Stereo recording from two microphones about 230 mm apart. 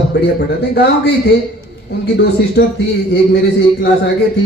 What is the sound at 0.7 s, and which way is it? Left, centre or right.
Speech, left.